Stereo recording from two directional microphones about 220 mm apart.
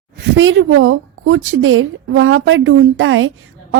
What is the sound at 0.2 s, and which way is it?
A woman's voice, 60° right (ahead or behind).